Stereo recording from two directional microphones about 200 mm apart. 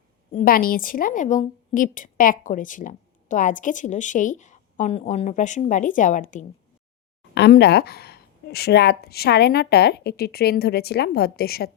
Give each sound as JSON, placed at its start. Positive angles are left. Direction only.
{"t": 0.3, "sound": "a woman's voice", "side_deg": 45}
{"t": 7.3, "sound": "a woman's voice", "side_deg": 55}